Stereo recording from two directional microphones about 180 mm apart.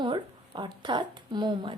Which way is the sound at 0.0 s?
25° right (ahead or behind).